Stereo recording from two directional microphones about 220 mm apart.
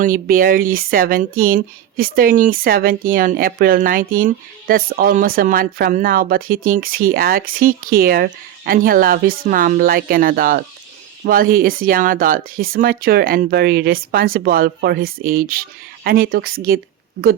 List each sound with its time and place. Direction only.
0.0 s speech: 40° right (ahead or behind)